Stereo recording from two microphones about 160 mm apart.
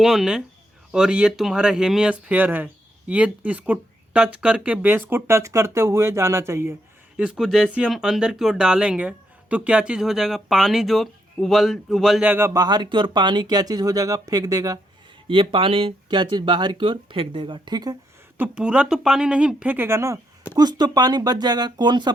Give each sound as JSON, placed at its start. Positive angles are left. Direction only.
{"t": 0.0, "sound": "speech", "side_deg": -5}
{"t": 7.2, "sound": "speech", "side_deg": -5}
{"t": 12.6, "sound": "speech", "side_deg": -25}
{"t": 15.3, "sound": "speech", "side_deg": -35}
{"t": 18.3, "sound": "speech", "side_deg": -10}